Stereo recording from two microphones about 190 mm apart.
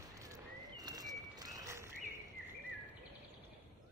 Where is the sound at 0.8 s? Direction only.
20° right (ahead or behind).